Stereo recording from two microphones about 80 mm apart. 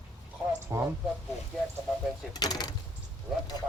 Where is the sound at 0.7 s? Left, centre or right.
Right.